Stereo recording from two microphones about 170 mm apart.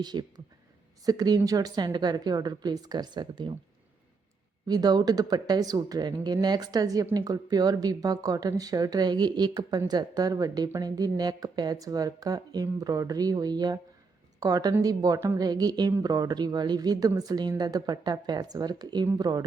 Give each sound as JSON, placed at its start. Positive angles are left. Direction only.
{"t": 0.0, "sound": "speech", "side_deg": -25}
{"t": 4.6, "sound": "speech", "side_deg": -25}